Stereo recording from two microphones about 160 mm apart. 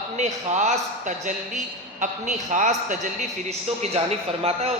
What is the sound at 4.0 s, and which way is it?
Speech, 40° right (ahead or behind).